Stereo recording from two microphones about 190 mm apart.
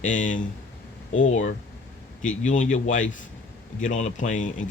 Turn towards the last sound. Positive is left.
turn(degrees=40)  # may be behind; listen again after turning